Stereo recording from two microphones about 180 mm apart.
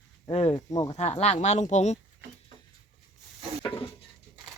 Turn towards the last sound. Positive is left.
turn(degrees=30)  # may be behind; listen again after turning